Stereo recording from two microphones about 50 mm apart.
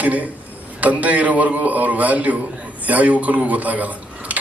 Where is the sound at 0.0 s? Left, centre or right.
Right.